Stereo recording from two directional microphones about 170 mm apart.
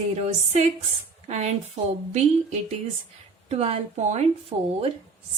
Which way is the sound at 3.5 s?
40° right (ahead or behind).